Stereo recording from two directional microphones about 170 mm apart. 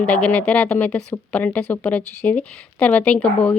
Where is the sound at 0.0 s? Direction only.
10° left (ahead or behind).